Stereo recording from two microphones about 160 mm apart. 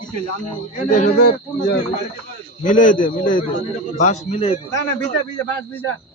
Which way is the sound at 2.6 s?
55° left (ahead or behind).